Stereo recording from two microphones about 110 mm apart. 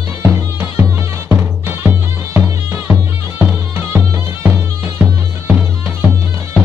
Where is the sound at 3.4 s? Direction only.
15° right (ahead or behind).